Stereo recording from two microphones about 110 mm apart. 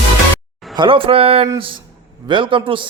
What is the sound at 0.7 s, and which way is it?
Speech, 50° right (ahead or behind).